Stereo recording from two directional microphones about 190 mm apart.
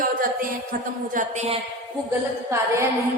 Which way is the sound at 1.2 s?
35° right (ahead or behind).